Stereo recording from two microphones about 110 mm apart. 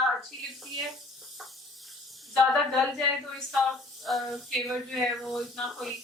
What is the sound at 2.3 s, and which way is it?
Speech, centre (ahead or behind).